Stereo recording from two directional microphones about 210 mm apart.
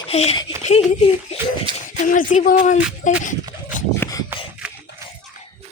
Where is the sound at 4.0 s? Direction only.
15° left (ahead or behind).